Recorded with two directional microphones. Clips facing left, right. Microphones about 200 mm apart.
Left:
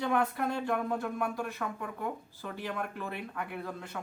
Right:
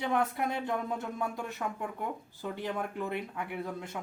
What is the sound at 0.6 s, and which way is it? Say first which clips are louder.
Speech: left 2 dB; 20° right (ahead or behind).